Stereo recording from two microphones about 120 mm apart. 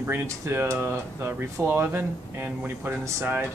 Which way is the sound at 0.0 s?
20° right (ahead or behind).